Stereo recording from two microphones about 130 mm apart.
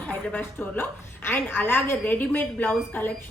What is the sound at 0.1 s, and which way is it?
A woman's voice, 15° left (ahead or behind).